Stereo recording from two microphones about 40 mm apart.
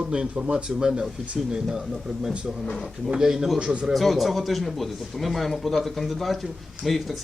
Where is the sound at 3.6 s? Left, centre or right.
Right.